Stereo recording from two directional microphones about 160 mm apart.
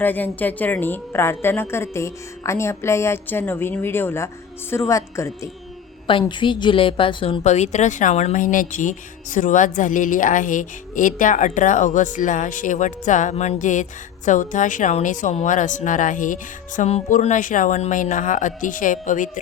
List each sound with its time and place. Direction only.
0.0 s a woman's voice: 10° left (ahead or behind)
6.1 s a woman's voice: 30° left (ahead or behind)
7.4 s speech: 45° left (ahead or behind)